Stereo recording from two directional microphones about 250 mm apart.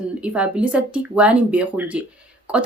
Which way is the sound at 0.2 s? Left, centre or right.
Centre.